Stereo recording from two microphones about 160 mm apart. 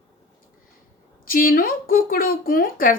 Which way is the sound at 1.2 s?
65° left (ahead or behind).